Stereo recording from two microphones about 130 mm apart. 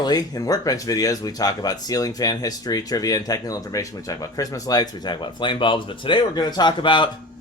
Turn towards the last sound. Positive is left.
turn(degrees=40)  # may be behind; listen again after turning